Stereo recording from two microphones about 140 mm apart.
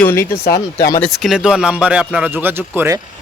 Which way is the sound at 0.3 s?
90° left.